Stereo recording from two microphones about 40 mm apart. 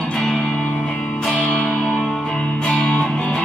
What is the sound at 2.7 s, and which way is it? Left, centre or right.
Music, left.